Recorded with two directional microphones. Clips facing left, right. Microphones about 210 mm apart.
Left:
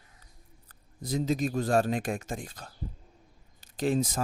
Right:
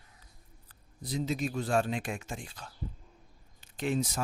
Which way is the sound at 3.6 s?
35° left (ahead or behind).